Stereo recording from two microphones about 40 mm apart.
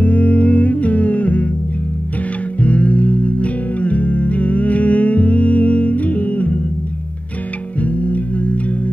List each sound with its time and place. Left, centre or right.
0.0 s music: left
2.6 s music: left
7.8 s music: left